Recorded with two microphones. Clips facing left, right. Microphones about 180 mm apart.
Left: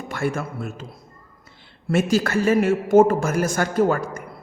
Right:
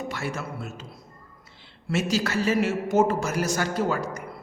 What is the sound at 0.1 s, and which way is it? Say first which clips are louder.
Speech: left 6 dB; 50° left (ahead or behind).